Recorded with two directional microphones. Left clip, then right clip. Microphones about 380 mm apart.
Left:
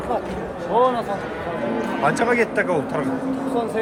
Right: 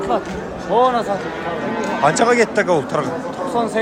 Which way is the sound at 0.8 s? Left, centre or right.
Right.